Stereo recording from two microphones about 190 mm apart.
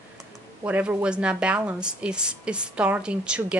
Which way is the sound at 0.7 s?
5° right (ahead or behind).